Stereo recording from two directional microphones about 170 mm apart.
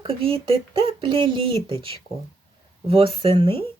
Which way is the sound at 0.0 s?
35° right (ahead or behind).